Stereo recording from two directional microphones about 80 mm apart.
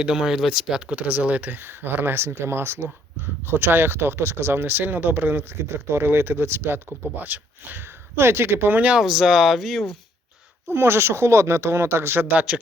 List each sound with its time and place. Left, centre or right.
0.0 s speech: centre
0.9 s speech: centre
8.9 s speech: centre
10.7 s speech: right